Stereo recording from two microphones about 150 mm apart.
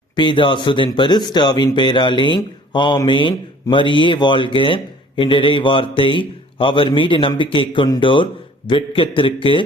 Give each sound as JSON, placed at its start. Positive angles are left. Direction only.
{"t": 0.2, "sound": "speech", "side_deg": 30}